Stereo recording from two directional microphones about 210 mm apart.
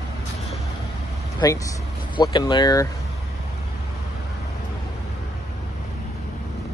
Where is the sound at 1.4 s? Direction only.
20° left (ahead or behind).